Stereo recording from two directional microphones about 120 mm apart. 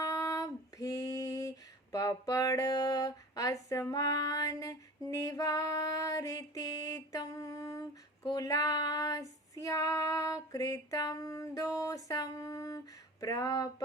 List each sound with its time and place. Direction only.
0.0 s female singing: 30° left (ahead or behind)